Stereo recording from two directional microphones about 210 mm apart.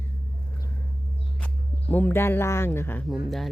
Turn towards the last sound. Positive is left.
turn(degrees=0)  # may be behind; listen again after turning